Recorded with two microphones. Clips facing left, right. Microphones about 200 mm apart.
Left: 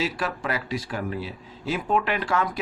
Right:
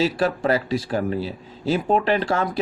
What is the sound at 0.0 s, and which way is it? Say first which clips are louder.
A man's voice: right 7 dB; 30° right (ahead or behind).